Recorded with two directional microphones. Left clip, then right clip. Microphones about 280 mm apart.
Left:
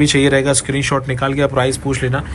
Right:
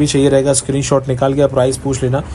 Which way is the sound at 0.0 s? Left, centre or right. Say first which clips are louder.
Right 1 dB; centre.